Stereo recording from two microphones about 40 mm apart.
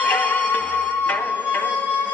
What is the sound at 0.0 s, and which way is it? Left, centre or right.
Music, left.